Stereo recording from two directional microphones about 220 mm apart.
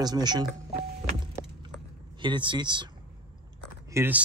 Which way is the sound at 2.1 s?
20° right (ahead or behind).